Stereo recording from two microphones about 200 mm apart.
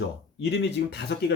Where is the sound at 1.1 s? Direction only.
60° left (ahead or behind).